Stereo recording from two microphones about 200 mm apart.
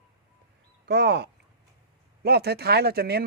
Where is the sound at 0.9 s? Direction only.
55° right (ahead or behind).